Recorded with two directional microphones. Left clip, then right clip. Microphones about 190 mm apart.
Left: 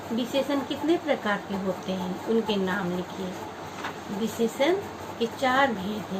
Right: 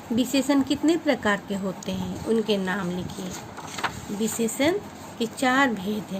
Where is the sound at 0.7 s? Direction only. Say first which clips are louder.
Right 3 dB; 65° right (ahead or behind).